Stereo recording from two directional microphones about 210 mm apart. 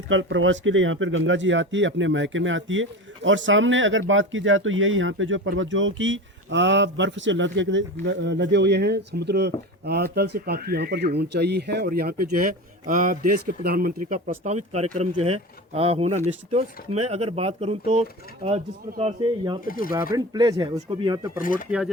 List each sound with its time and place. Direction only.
0.1 s speech: 65° right (ahead or behind); by 19.5 s 25° right (ahead or behind)
19.6 s speech: 45° left (ahead or behind)
20.1 s speech: 20° right (ahead or behind)
21.3 s speech: 40° left (ahead or behind)
21.7 s speech: 5° right (ahead or behind)